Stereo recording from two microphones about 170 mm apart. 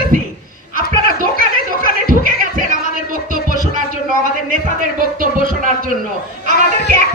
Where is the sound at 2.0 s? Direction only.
55° right (ahead or behind).